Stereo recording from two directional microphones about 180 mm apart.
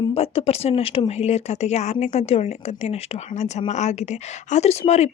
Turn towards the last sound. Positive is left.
turn(degrees=35)  # may be behind; listen again after turning